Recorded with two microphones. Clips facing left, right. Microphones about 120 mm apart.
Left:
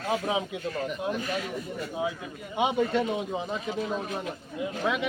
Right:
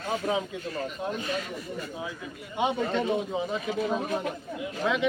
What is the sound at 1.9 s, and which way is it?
A man's voice, 20° left (ahead or behind).